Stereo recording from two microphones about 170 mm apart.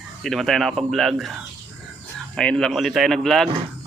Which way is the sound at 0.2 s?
Centre (ahead or behind).